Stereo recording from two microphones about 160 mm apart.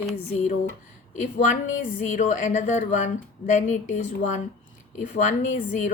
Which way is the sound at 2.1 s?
50° left (ahead or behind).